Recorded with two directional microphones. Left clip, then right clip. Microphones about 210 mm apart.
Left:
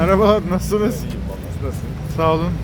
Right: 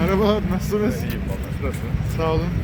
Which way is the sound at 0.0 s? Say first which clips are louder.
Left 6 dB; 50° left (ahead or behind).